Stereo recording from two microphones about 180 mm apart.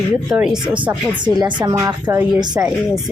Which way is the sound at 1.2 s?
25° right (ahead or behind).